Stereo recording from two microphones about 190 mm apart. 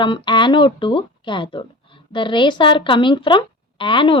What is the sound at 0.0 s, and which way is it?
Speech, 25° left (ahead or behind).